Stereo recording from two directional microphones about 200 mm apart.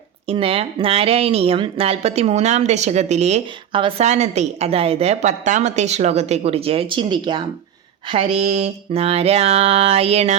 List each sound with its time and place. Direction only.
0.3 s speech: 30° right (ahead or behind)